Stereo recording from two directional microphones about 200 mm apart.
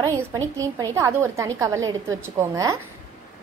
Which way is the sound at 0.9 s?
15° right (ahead or behind).